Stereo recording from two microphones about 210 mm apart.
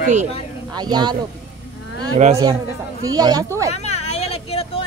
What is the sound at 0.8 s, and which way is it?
Speech, 20° right (ahead or behind).